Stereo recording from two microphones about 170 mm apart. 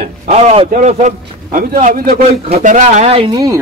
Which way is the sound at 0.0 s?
40° right (ahead or behind).